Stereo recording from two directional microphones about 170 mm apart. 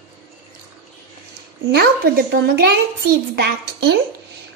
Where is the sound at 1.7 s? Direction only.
65° right (ahead or behind).